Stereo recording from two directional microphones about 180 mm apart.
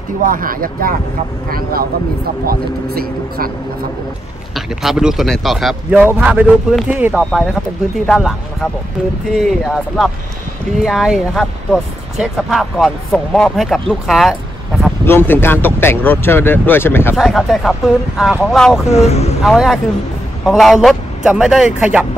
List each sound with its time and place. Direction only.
0.2 s speech: 50° right (ahead or behind)
4.6 s speech: 5° right (ahead or behind); by 17.2 s 10° left (ahead or behind)
17.2 s speech: centre (ahead or behind)
18.9 s speech: 35° left (ahead or behind)
19.4 s speech: centre (ahead or behind)